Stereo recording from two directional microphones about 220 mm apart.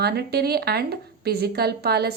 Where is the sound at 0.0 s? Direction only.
45° right (ahead or behind).